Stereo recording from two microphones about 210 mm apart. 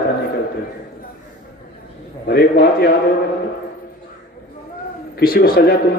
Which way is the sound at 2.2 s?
50° left (ahead or behind).